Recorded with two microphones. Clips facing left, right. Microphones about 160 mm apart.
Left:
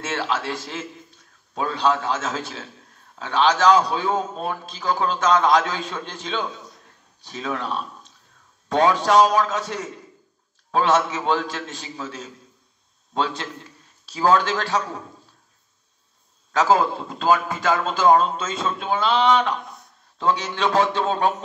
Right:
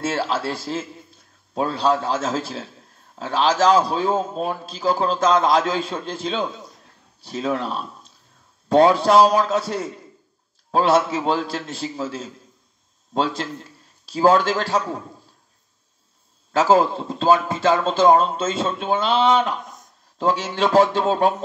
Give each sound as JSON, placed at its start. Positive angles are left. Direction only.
{"t": 0.0, "sound": "a man's voice", "side_deg": -35}
{"t": 16.7, "sound": "a man's voice", "side_deg": -35}